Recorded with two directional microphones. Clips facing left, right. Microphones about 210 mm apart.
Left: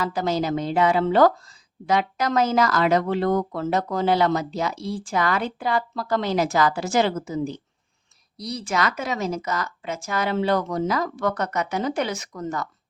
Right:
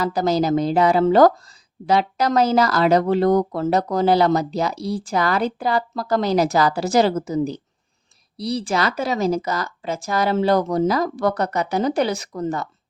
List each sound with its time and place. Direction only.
0.0 s speech: 40° right (ahead or behind)